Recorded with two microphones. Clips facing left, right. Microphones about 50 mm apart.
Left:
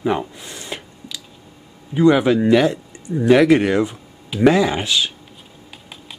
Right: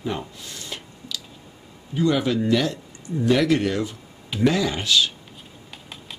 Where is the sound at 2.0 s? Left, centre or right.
Left.